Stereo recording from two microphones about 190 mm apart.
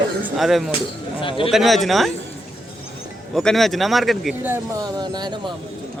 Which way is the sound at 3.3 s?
Centre (ahead or behind).